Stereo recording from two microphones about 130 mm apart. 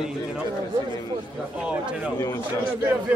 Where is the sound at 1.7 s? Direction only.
10° right (ahead or behind).